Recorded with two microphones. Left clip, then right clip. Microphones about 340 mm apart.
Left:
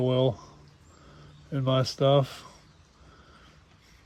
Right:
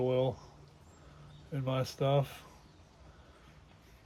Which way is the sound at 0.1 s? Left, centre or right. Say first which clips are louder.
Left 6 dB; left.